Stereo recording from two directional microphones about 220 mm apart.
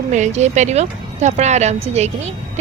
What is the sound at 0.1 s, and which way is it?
A woman's voice, 30° right (ahead or behind).